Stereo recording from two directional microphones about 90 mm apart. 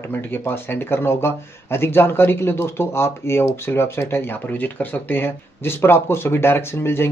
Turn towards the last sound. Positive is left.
turn(degrees=25)  # may be behind; listen again after turning